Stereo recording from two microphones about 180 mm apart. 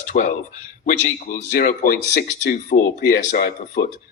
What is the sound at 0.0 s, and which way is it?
Speech, 45° left (ahead or behind).